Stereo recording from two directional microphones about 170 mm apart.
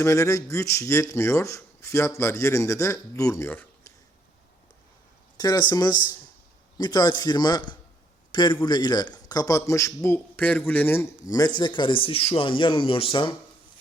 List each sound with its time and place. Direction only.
0.0 s speech: 15° left (ahead or behind)
5.4 s a man's voice: 25° left (ahead or behind)